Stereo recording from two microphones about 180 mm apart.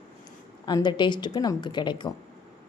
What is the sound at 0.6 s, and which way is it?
A woman's voice, 25° left (ahead or behind).